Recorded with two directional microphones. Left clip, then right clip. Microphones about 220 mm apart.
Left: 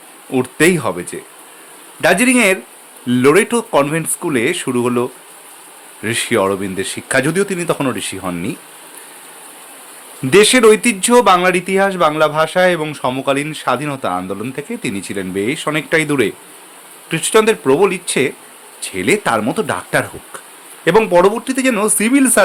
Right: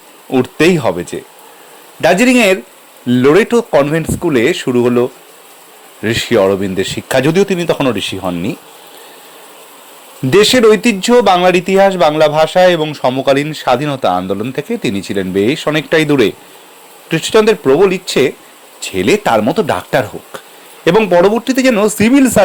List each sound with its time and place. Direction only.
0.3 s speech: 15° right (ahead or behind)
10.2 s speech: 15° right (ahead or behind)